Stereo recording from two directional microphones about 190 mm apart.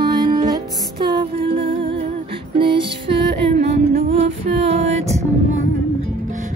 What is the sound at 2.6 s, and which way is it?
Female singing, 25° right (ahead or behind).